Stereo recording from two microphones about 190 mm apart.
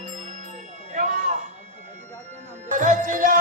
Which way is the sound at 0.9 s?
45° right (ahead or behind).